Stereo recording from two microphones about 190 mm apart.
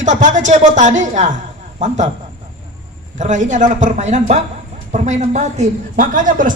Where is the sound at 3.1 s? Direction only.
40° right (ahead or behind).